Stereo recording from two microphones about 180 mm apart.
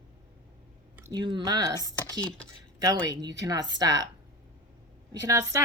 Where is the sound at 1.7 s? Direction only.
15° left (ahead or behind).